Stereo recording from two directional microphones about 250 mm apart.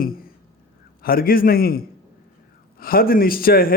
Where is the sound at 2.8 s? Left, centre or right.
Left.